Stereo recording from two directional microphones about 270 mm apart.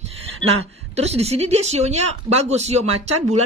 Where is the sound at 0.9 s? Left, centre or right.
Right.